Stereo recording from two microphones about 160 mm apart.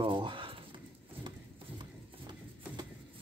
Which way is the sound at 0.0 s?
30° right (ahead or behind).